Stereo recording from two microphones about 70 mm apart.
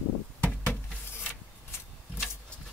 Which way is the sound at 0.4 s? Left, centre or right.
Left.